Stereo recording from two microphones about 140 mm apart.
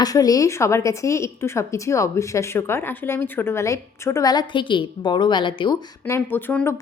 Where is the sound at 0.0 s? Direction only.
25° left (ahead or behind).